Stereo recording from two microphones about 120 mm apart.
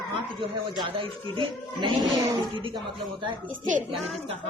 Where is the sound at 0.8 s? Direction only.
45° right (ahead or behind).